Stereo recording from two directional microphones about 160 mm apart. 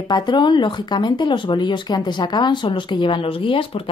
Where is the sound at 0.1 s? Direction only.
30° left (ahead or behind).